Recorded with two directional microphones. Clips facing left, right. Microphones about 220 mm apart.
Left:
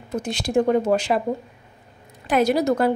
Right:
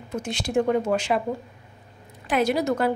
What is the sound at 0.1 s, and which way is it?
A woman's voice, 35° left (ahead or behind).